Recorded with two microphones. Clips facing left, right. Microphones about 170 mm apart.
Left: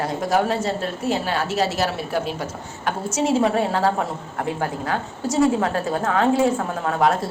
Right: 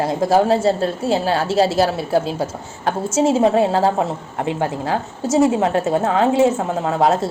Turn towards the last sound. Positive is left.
turn(degrees=-25)  # may be behind; listen again after turning